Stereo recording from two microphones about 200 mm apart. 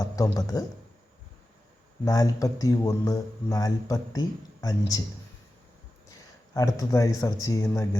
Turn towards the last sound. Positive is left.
turn(degrees=15)  # may be behind; listen again after turning